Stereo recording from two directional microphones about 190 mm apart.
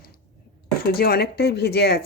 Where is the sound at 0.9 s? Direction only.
55° left (ahead or behind).